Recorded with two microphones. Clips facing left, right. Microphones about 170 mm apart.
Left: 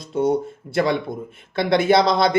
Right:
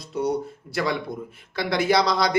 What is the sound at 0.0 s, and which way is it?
A man's voice, 25° left (ahead or behind).